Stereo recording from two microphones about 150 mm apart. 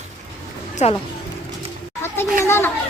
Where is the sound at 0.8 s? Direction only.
50° left (ahead or behind).